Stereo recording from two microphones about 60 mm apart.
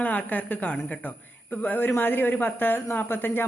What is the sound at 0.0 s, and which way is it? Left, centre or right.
A woman's voice, left.